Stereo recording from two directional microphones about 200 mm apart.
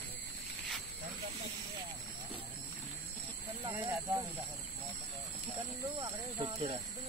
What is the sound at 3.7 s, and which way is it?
Snake, 10° right (ahead or behind).